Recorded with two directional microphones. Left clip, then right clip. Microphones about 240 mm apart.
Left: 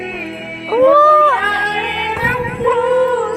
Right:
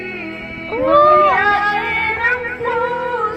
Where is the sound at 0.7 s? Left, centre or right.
Left.